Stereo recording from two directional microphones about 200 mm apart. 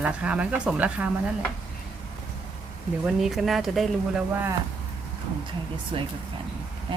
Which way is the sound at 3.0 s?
Centre (ahead or behind).